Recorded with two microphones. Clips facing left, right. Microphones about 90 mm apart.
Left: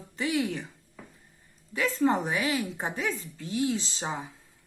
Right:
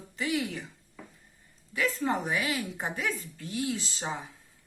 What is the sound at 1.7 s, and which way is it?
Speech, 30° left (ahead or behind).